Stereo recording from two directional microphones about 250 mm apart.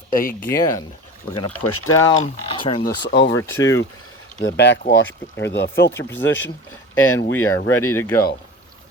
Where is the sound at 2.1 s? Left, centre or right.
Left.